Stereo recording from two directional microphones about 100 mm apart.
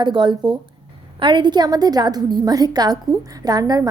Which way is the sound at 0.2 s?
50° right (ahead or behind).